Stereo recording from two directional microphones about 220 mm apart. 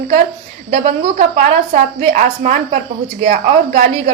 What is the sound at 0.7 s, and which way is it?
A woman's voice, 35° right (ahead or behind).